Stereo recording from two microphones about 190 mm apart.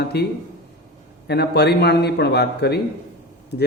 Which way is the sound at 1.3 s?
60° left (ahead or behind).